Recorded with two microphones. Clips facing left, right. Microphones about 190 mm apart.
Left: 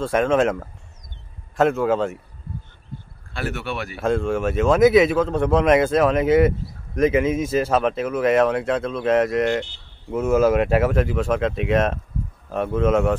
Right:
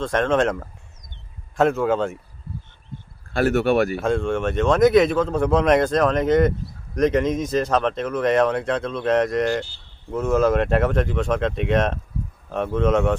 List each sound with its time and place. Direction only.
0.0 s speech: 5° left (ahead or behind)
3.3 s speech: 45° right (ahead or behind)
3.9 s speech: centre (ahead or behind)